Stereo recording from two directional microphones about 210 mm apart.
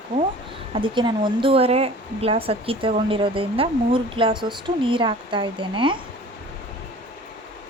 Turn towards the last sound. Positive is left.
turn(degrees=-25)  # may be behind; listen again after turning